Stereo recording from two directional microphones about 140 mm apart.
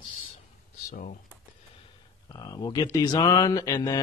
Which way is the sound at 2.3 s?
25° left (ahead or behind).